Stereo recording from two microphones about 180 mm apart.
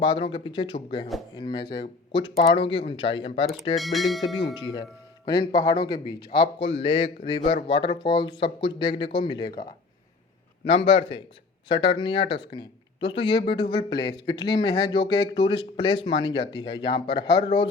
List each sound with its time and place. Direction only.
0.0 s speech: 25° left (ahead or behind)
3.8 s speech: centre (ahead or behind)
4.5 s speech: 25° left (ahead or behind)
10.7 s a man's voice: 30° left (ahead or behind)